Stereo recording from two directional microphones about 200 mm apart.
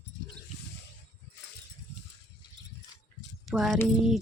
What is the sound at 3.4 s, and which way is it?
Speech, centre (ahead or behind).